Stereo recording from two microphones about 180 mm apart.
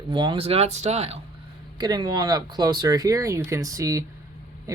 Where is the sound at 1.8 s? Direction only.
25° right (ahead or behind).